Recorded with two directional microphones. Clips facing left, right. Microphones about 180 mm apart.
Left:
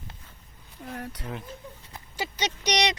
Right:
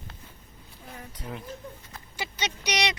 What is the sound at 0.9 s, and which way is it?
Speech, 70° left (ahead or behind).